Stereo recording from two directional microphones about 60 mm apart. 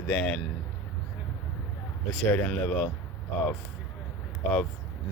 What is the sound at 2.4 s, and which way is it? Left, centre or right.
Speech, left.